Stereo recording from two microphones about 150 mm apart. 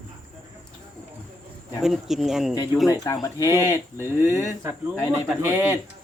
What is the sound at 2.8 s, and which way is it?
Speech, 20° left (ahead or behind).